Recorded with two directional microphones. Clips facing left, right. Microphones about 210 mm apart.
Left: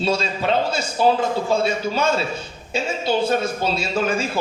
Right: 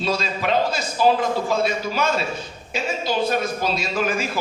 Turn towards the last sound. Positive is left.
turn(degrees=30)  # may be behind; listen again after turning